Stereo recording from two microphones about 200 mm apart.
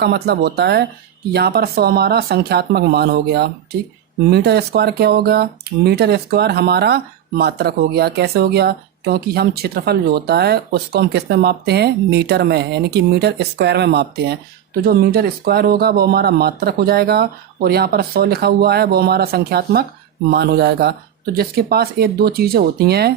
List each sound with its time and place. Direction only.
0.0 s speech: 55° right (ahead or behind)